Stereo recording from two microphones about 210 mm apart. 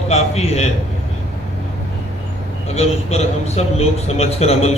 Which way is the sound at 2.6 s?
30° left (ahead or behind).